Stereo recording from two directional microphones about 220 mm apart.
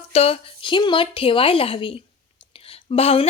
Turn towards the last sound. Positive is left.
turn(degrees=30)  # may be behind; listen again after turning